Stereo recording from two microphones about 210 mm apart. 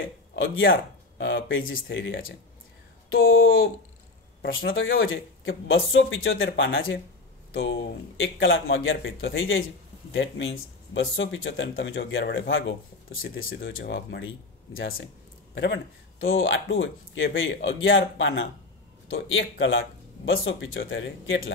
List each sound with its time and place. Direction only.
0.7 s speech: 50° left (ahead or behind); by 7.0 s 70° left (ahead or behind)
8.2 s speech: 65° left (ahead or behind)